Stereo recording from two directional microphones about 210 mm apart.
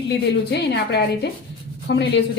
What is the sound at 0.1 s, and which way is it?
A woman's voice, 50° left (ahead or behind).